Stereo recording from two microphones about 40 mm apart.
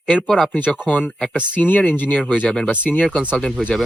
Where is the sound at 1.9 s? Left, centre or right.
Left.